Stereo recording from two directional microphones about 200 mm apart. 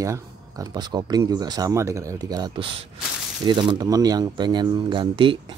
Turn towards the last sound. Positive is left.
turn(degrees=-25)  # may be behind; listen again after turning